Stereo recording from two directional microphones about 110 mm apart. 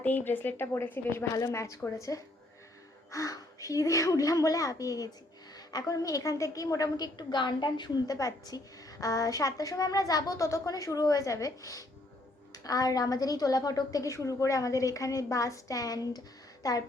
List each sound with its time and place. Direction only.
0.0 s a woman's voice: 15° left (ahead or behind); by 16.8 s 30° left (ahead or behind)